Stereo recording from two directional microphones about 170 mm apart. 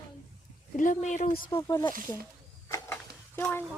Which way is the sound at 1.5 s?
15° left (ahead or behind).